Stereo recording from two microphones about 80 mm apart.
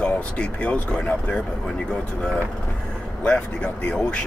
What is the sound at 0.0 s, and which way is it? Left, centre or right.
Speech, centre.